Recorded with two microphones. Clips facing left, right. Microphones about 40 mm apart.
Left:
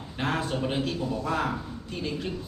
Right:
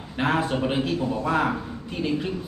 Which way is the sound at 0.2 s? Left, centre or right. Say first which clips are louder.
Right 5 dB; centre.